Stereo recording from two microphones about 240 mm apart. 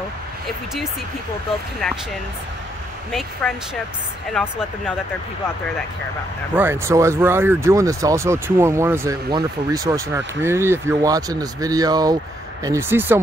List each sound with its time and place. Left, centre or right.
3.1 s speech: centre
6.5 s speech: centre